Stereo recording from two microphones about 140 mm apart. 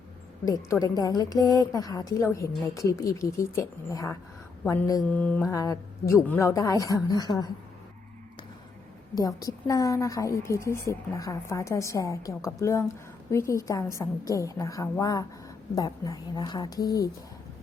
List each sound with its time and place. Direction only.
0.4 s a woman's voice: 25° left (ahead or behind); by 5.4 s 10° left (ahead or behind)
5.5 s a woman's voice: 25° left (ahead or behind)
6.2 s a woman's voice: 15° left (ahead or behind)
9.1 s a woman's voice: 25° left (ahead or behind)